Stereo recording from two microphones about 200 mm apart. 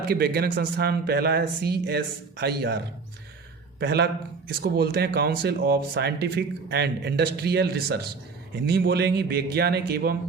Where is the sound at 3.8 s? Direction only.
55° right (ahead or behind).